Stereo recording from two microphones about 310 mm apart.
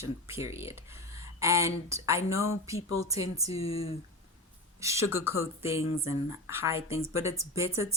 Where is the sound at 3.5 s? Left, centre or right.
Centre.